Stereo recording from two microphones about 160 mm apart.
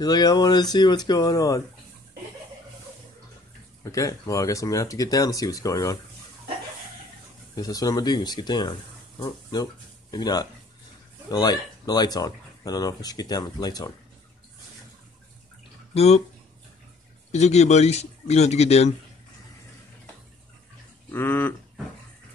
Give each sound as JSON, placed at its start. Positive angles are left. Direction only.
{"t": 0.0, "sound": "speech", "side_deg": 25}
{"t": 3.8, "sound": "speech", "side_deg": 20}
{"t": 7.5, "sound": "speech", "side_deg": 25}
{"t": 15.9, "sound": "speech", "side_deg": 40}
{"t": 17.3, "sound": "a man's voice", "side_deg": 45}
{"t": 21.1, "sound": "a sound", "side_deg": 15}